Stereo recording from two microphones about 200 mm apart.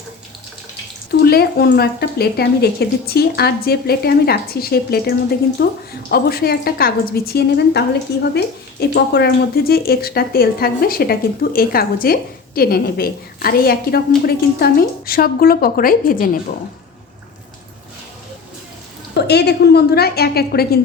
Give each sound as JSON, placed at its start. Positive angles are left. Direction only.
{"t": 1.2, "sound": "a woman's voice", "side_deg": 50}
{"t": 19.1, "sound": "a woman's voice", "side_deg": 55}